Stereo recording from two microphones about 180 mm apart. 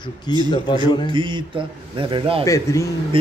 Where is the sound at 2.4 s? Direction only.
15° left (ahead or behind).